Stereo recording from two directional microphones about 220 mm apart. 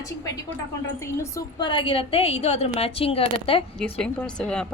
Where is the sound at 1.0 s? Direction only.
15° left (ahead or behind).